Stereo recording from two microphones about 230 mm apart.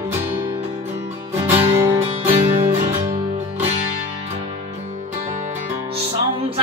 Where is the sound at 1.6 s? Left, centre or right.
Centre.